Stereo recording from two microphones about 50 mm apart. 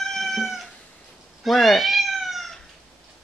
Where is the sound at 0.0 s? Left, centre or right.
Centre.